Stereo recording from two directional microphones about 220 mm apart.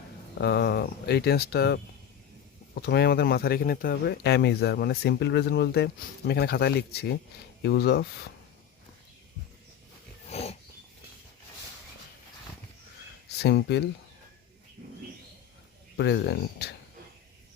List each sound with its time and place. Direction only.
0.3 s speech: 50° left (ahead or behind)
10.2 s dog: 30° left (ahead or behind)
13.4 s speech: 50° left (ahead or behind)
16.0 s speech: 50° left (ahead or behind)